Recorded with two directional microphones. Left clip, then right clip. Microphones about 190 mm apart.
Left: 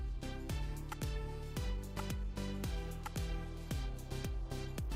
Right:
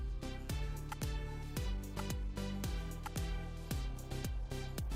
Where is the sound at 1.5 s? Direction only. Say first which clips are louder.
Right 1 dB; centre (ahead or behind).